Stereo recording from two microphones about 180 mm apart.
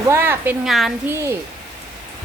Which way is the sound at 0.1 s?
10° right (ahead or behind).